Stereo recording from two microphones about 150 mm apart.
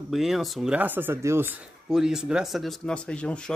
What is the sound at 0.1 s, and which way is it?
Speech, centre (ahead or behind).